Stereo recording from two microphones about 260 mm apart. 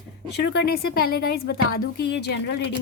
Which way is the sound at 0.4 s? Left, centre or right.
Left.